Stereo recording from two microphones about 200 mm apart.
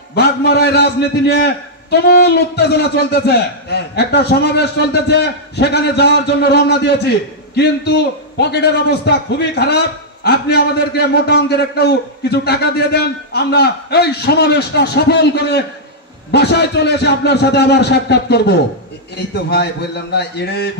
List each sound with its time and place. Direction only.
0.1 s a man's voice: 55° left (ahead or behind)